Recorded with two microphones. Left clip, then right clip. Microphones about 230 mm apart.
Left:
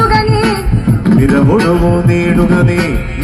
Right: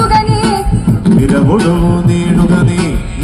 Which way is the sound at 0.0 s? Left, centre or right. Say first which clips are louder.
Even; right.